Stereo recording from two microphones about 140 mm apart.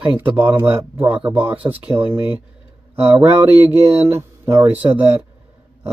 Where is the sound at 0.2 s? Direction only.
10° right (ahead or behind).